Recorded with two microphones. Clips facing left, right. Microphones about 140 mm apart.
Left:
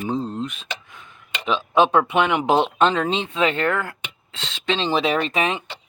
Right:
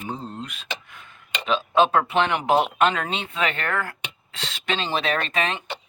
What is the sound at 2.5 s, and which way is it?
Speech, 30° left (ahead or behind).